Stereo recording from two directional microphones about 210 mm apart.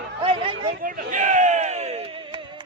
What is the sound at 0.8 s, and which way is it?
Speech, 35° right (ahead or behind).